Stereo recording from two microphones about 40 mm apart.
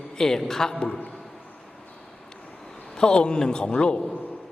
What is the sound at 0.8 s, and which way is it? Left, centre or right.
Speech, left.